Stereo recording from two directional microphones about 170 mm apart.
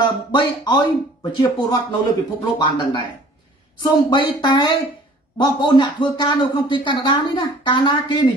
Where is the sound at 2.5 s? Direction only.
30° left (ahead or behind).